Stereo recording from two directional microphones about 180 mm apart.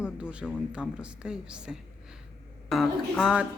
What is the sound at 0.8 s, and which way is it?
Speech, 5° right (ahead or behind).